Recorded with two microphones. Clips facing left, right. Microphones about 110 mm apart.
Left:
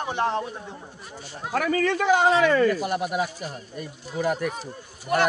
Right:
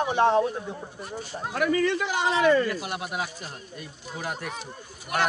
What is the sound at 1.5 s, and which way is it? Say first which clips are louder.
Speech: left 1 dB; 65° left (ahead or behind).